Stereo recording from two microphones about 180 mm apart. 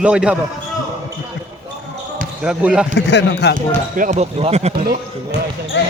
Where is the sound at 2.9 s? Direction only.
70° left (ahead or behind).